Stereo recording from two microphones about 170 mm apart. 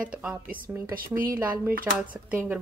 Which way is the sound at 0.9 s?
60° right (ahead or behind).